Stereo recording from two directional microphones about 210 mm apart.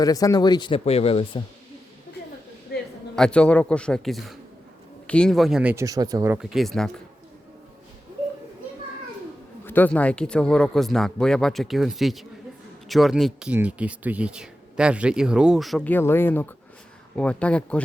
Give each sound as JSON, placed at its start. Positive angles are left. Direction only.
{"t": 0.0, "sound": "speech", "side_deg": 15}
{"t": 2.7, "sound": "a sound", "side_deg": 50}
{"t": 3.2, "sound": "speech", "side_deg": 5}
{"t": 9.6, "sound": "speech", "side_deg": 10}